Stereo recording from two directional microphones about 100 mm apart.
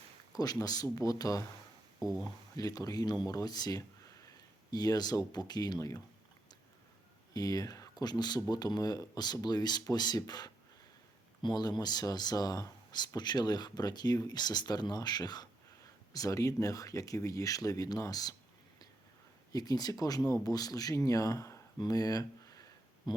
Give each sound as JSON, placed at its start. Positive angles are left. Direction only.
{"t": 0.3, "sound": "speech", "side_deg": 40}
{"t": 2.0, "sound": "speech", "side_deg": -5}
{"t": 2.2, "sound": "speech", "side_deg": 40}
{"t": 7.3, "sound": "speech", "side_deg": 40}
{"t": 19.5, "sound": "speech", "side_deg": 40}